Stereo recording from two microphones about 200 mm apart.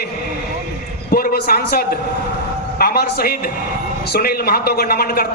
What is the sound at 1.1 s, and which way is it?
A man's voice, 50° left (ahead or behind).